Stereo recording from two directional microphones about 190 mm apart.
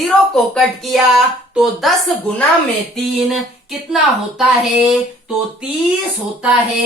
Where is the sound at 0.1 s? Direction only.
Centre (ahead or behind).